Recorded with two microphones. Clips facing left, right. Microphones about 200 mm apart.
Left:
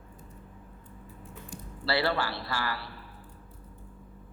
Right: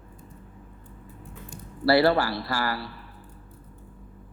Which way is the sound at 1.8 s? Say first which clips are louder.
Right 9 dB; 40° right (ahead or behind).